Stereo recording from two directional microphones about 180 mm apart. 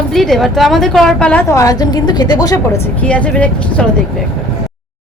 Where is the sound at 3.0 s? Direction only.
10° left (ahead or behind).